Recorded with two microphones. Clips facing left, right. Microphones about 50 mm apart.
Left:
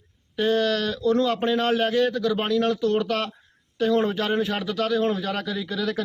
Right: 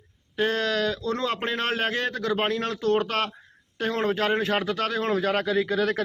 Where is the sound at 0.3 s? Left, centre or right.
Right.